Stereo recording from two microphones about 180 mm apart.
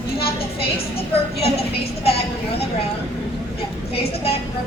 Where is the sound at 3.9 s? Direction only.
35° left (ahead or behind).